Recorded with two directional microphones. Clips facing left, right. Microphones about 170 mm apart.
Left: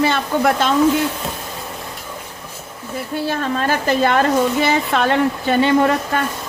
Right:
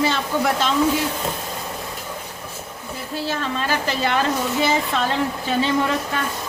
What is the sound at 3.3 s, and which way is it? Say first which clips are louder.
Speech: left 4 dB; 50° left (ahead or behind).